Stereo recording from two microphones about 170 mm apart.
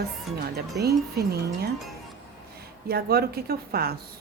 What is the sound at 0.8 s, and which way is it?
Speech, 70° right (ahead or behind).